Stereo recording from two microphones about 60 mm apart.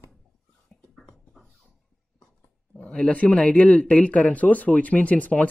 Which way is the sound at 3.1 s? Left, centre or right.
Left.